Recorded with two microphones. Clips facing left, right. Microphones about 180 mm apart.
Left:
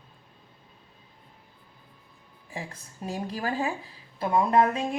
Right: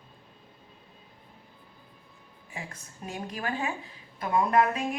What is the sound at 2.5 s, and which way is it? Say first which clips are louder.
A woman's voice: left 3 dB; 35° left (ahead or behind).